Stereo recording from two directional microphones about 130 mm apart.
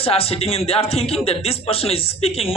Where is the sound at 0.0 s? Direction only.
50° left (ahead or behind).